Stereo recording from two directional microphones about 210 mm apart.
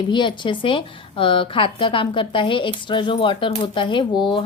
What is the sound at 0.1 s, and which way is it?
Speech, 20° left (ahead or behind).